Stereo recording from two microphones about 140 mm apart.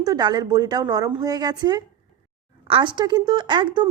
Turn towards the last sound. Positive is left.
turn(degrees=-30)  # may be behind; listen again after turning